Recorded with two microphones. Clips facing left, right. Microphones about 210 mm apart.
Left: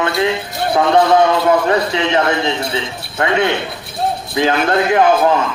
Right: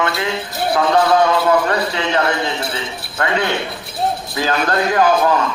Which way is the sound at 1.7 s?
25° left (ahead or behind).